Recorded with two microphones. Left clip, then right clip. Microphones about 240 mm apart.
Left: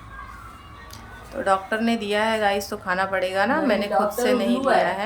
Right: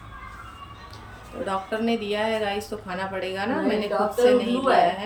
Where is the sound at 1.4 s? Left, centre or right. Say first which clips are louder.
Left 5 dB; centre.